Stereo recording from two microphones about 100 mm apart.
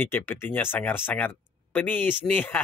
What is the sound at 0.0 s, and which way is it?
Speech, 25° left (ahead or behind).